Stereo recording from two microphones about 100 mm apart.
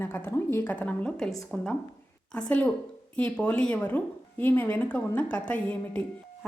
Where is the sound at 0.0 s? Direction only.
20° left (ahead or behind).